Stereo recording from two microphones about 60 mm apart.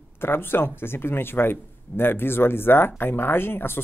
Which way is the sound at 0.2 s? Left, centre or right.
Left.